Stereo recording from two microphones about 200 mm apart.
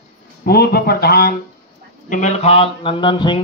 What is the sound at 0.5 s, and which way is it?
Speech, 50° left (ahead or behind).